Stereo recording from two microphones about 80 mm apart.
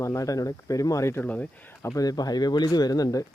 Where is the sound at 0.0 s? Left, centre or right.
Left.